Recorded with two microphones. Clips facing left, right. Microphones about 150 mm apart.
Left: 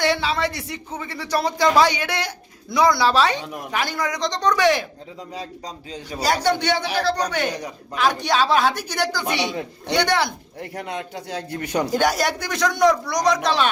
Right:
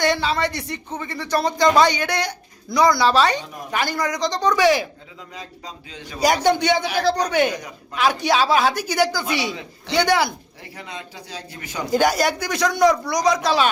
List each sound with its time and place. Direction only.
0.0 s speech: 5° left (ahead or behind)
5.3 s a man's voice: 35° left (ahead or behind)
6.1 s a man's voice: 15° right (ahead or behind)
10.6 s a man's voice: 60° left (ahead or behind)
11.9 s speech: centre (ahead or behind)